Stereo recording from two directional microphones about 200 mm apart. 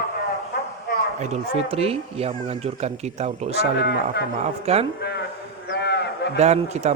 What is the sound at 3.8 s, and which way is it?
Speech, 55° left (ahead or behind).